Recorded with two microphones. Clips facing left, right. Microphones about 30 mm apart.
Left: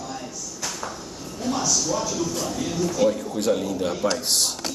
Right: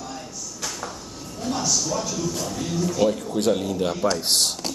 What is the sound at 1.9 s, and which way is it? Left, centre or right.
Speech, centre.